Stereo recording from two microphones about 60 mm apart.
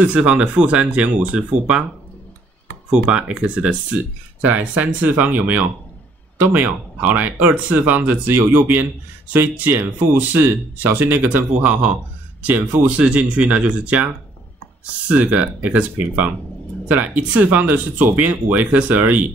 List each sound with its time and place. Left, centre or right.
0.1 s speech: centre
2.9 s speech: centre
15.0 s speech: right